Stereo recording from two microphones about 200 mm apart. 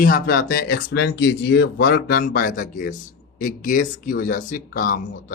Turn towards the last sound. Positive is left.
turn(degrees=40)  # may be behind; listen again after turning